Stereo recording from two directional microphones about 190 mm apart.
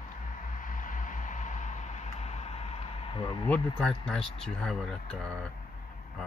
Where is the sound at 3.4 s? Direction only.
5° left (ahead or behind).